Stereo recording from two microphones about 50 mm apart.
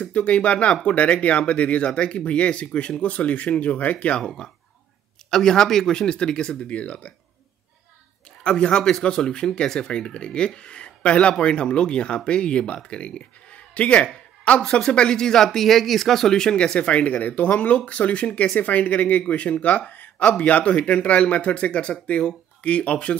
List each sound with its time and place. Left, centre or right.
0.0 s speech: left
5.3 s speech: centre; by 7.1 s left
8.5 s speech: left
14.0 s a sound: left
14.6 s speech: centre
19.9 s a sound: left
20.2 s speech: left